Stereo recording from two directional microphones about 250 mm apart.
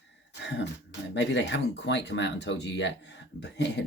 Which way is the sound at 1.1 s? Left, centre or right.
Left.